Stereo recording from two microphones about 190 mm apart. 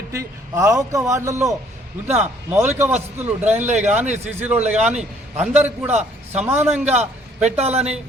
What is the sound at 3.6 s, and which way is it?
Speech, 40° right (ahead or behind).